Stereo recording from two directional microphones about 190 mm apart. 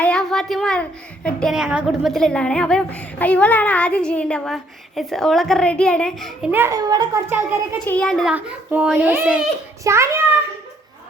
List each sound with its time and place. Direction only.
0.0 s a child's voice: 5° left (ahead or behind)
6.5 s a child's voice: 15° right (ahead or behind)
7.9 s a child's voice: 5° left (ahead or behind); by 10.1 s 15° right (ahead or behind)